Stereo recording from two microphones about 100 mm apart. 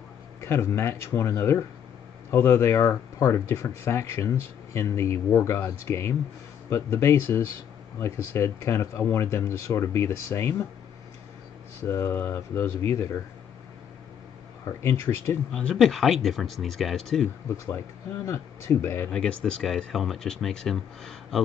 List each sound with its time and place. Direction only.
0.4 s speech: 25° left (ahead or behind)
11.8 s speech: 25° left (ahead or behind)
14.8 s speech: 25° left (ahead or behind)
15.5 s speech: 5° left (ahead or behind)
17.6 s speech: 25° left (ahead or behind)
19.0 s speech: 10° left (ahead or behind)